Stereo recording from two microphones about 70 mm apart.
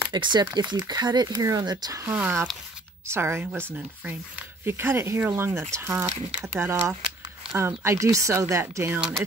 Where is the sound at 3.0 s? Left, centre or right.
Right.